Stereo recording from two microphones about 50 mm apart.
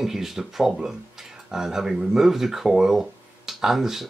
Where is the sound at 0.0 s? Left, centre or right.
Centre.